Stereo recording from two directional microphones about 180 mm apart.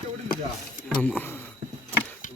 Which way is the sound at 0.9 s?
5° left (ahead or behind).